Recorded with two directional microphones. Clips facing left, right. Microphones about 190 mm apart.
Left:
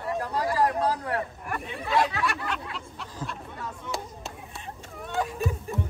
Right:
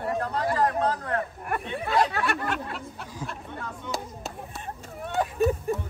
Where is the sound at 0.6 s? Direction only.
10° left (ahead or behind).